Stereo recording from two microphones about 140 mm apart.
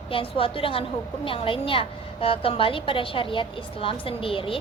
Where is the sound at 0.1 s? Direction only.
40° left (ahead or behind).